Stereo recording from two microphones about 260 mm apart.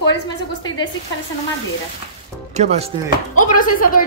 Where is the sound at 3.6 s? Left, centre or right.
Left.